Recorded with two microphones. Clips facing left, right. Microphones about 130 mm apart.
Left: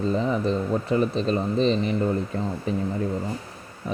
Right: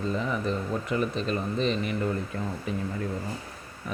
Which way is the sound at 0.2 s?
30° left (ahead or behind).